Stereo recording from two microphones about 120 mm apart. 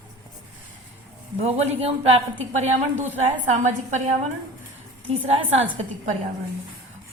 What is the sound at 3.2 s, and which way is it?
Speech, 80° right.